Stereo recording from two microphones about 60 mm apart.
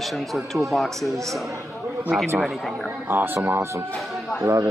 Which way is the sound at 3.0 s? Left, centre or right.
Right.